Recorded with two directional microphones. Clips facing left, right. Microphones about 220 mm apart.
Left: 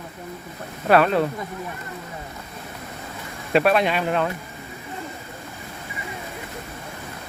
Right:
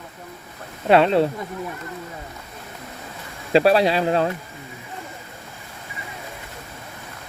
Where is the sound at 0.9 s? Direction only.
25° right (ahead or behind).